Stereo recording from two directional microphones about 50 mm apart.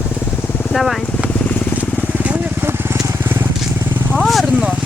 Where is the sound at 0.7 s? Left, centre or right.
Centre.